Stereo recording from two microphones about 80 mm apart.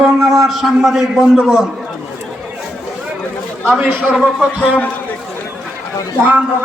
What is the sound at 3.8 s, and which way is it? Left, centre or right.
Speech, centre.